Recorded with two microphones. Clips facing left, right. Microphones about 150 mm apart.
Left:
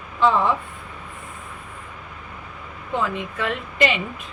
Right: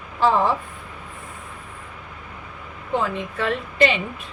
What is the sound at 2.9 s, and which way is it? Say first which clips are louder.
Speech: right 1 dB; 35° right (ahead or behind).